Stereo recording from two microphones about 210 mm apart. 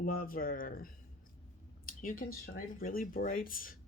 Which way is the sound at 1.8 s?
40° left (ahead or behind).